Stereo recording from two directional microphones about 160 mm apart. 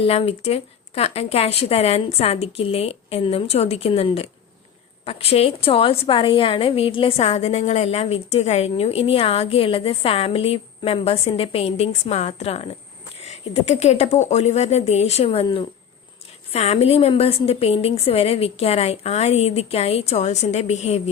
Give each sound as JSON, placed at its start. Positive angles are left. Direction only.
{"t": 0.0, "sound": "a woman's voice", "side_deg": 40}